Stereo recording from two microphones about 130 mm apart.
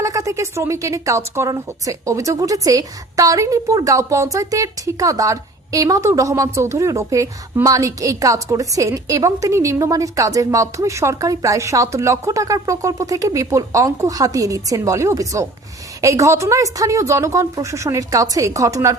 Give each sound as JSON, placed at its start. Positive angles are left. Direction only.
{"t": 0.0, "sound": "a woman's voice", "side_deg": -25}